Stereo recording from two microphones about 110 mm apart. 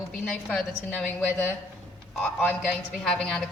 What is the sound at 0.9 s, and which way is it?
A woman's voice, 15° left (ahead or behind).